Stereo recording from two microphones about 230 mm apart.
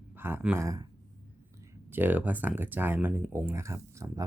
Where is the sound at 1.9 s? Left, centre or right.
Centre.